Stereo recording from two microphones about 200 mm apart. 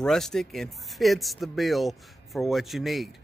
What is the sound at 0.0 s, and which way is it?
A man's voice, centre (ahead or behind).